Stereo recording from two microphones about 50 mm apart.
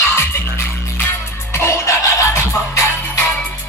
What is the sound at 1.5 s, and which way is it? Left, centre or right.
Music, left.